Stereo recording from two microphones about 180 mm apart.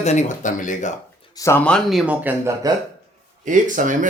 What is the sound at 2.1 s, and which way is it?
Speech, 10° right (ahead or behind).